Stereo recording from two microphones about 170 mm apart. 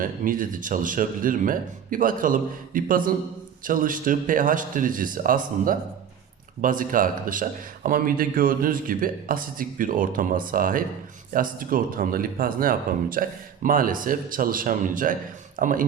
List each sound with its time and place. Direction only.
0.0 s speech: 55° right (ahead or behind)